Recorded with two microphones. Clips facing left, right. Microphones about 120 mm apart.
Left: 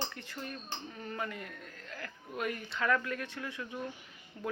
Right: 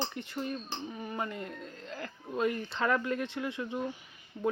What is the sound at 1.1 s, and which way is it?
Speech, 25° right (ahead or behind).